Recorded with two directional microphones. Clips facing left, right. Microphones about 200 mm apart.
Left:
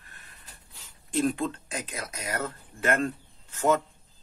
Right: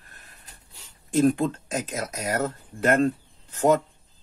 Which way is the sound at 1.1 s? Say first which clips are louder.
Right 6 dB; 45° right (ahead or behind).